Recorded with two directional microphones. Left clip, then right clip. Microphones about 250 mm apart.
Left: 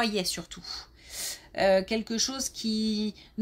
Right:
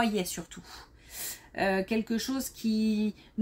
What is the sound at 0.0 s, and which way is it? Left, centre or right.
Speech, left.